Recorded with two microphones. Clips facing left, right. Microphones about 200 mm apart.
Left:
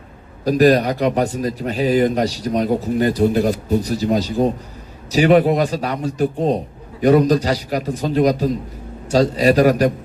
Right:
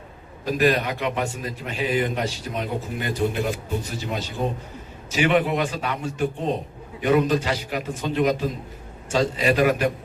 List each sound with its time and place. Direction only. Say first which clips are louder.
0.4 s a man's voice: left 8 dB; 40° left (ahead or behind)